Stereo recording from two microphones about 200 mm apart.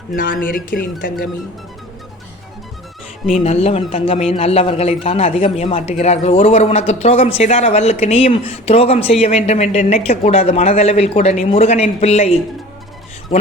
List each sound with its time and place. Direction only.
0.1 s speech: 45° left (ahead or behind)
3.3 s a man's voice: 30° left (ahead or behind)
13.3 s a sound: 30° left (ahead or behind)